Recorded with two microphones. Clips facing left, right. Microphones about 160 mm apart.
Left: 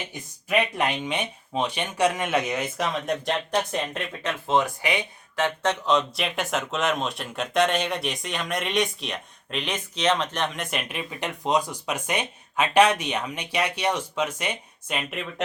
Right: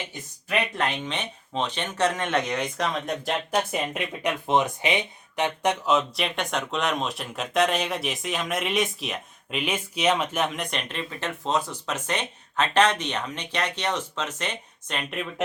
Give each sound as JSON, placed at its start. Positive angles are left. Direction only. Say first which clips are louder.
{"t": 0.1, "sound": "speech", "louder": "left 5 dB", "side_deg": 10}
{"t": 5.8, "sound": "speech", "louder": "even", "side_deg": -5}